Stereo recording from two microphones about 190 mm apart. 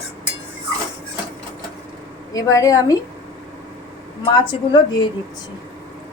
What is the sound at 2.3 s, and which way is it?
Speech, 15° left (ahead or behind).